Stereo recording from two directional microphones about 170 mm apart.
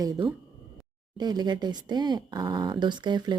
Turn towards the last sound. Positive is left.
turn(degrees=-25)  # may be behind; listen again after turning